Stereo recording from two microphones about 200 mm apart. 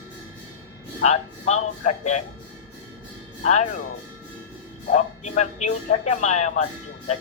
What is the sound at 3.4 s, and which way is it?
Speech, 35° left (ahead or behind).